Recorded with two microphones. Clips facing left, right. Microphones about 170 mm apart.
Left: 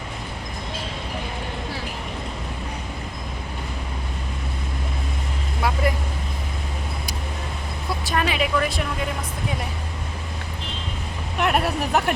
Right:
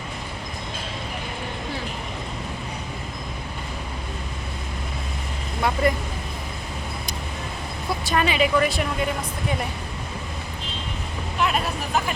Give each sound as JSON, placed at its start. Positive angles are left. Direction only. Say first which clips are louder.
{"t": 5.8, "sound": "vehicle", "louder": "right 4 dB", "side_deg": 5}
{"t": 8.0, "sound": "a woman's voice", "louder": "right 2 dB", "side_deg": 0}
{"t": 11.3, "sound": "speech", "louder": "left 3 dB", "side_deg": 65}